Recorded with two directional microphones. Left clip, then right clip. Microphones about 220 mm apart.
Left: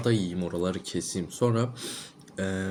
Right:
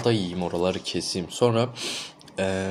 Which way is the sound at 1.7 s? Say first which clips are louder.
Right 7 dB; 15° left (ahead or behind).